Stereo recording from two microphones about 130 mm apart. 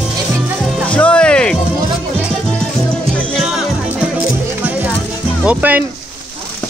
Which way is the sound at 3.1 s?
10° left (ahead or behind).